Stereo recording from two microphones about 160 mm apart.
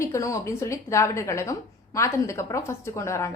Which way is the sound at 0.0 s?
20° left (ahead or behind).